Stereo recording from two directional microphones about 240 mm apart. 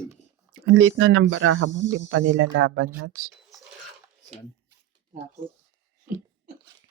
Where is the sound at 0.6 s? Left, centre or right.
Right.